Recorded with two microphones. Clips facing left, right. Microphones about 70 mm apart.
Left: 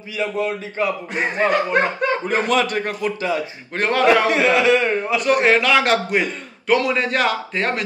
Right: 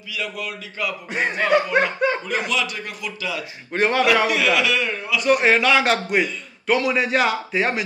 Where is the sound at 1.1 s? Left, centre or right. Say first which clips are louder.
Right 2 dB; centre.